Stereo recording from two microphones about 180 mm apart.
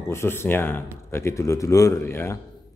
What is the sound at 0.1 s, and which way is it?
A man's voice, 15° left (ahead or behind).